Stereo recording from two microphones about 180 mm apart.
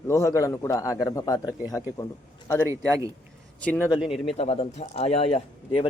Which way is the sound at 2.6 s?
20° right (ahead or behind).